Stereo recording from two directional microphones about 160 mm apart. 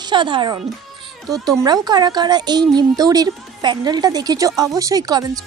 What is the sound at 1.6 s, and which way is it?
A woman's voice, 25° right (ahead or behind).